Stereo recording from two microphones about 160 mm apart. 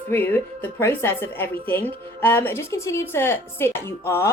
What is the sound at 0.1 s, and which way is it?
A woman's voice, 10° left (ahead or behind).